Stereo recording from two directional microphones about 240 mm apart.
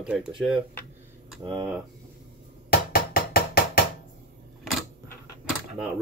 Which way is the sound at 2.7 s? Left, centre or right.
Left.